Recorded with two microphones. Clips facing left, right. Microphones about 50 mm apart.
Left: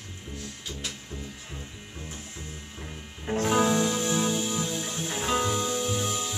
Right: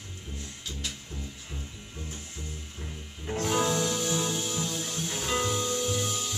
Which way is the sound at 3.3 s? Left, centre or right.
Centre.